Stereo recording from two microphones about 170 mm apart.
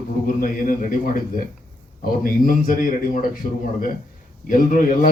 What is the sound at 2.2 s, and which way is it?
Speech, 55° left (ahead or behind).